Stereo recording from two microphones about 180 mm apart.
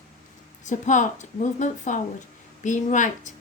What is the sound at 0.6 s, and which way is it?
A woman's voice, 45° left (ahead or behind).